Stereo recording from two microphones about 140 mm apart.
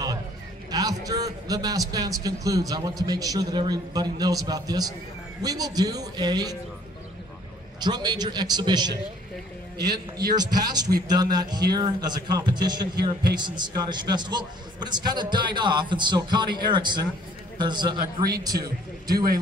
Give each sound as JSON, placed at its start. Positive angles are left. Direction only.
{"t": 0.7, "sound": "a man's voice", "side_deg": -25}
{"t": 7.8, "sound": "a man's voice", "side_deg": -30}